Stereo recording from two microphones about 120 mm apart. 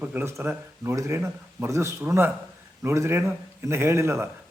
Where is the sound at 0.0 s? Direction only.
15° right (ahead or behind).